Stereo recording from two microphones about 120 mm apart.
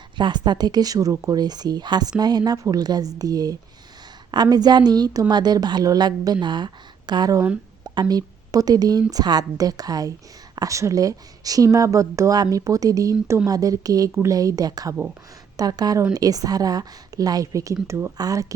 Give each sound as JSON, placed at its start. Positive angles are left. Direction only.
{"t": 0.2, "sound": "a woman's voice", "side_deg": -40}